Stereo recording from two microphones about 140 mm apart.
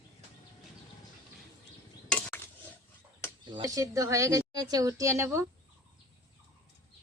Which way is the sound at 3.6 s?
25° right (ahead or behind).